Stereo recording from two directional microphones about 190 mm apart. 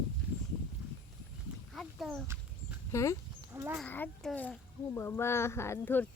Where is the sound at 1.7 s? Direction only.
Centre (ahead or behind).